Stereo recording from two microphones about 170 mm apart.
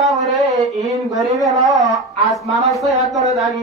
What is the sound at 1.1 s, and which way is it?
Speech, 20° right (ahead or behind).